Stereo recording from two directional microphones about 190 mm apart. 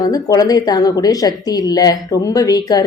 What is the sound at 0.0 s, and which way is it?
A woman's voice, 20° left (ahead or behind).